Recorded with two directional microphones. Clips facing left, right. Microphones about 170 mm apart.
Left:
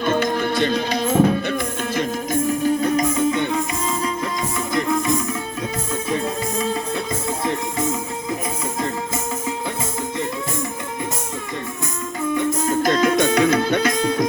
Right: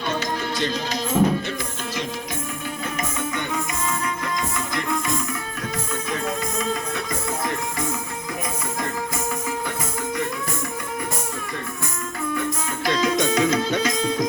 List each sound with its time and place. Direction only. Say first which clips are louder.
0.0 s music: left 6 dB; 55° left (ahead or behind)
2.0 s music: left 9 dB; 40° left (ahead or behind)
4.7 s music: left 8 dB; 25° left (ahead or behind)
12.6 s music: left 5 dB; 45° left (ahead or behind)